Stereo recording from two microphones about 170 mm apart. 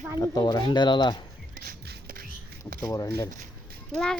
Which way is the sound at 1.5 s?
60° right (ahead or behind).